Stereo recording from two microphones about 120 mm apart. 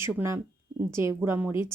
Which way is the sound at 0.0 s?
20° right (ahead or behind).